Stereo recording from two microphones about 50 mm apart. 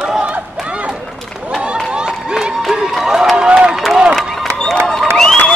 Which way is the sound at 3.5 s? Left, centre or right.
Centre.